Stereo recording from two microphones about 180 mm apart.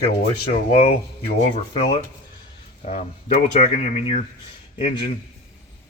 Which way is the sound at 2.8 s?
40° left (ahead or behind).